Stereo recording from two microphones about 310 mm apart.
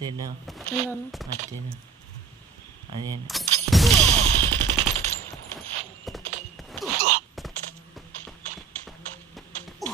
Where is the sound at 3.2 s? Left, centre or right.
Centre.